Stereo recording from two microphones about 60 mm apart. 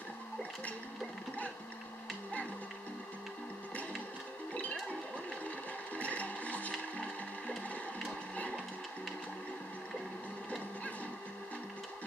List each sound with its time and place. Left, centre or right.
5.9 s music: left